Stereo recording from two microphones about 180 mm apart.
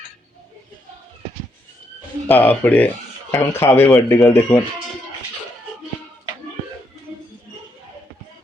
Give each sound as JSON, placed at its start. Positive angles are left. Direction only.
{"t": 2.2, "sound": "speech", "side_deg": 10}